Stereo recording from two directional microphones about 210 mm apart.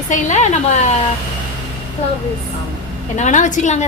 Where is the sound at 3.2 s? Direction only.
35° left (ahead or behind).